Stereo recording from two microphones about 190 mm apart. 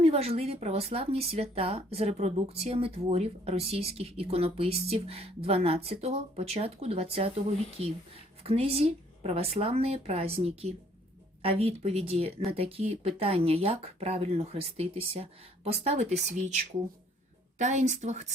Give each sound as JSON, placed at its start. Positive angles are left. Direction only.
{"t": 0.0, "sound": "speech", "side_deg": -30}
{"t": 8.4, "sound": "speech", "side_deg": -30}